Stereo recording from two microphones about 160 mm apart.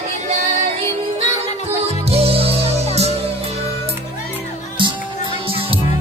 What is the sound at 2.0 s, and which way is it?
Music, 40° right (ahead or behind).